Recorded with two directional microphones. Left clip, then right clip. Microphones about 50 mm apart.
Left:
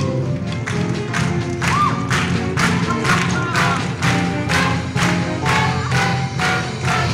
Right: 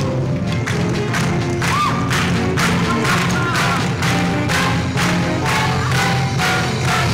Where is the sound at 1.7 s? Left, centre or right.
Left.